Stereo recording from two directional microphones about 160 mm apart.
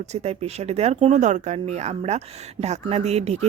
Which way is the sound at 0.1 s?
45° right (ahead or behind).